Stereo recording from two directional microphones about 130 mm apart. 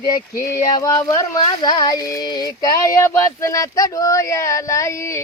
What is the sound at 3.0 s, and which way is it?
Speech, 20° left (ahead or behind).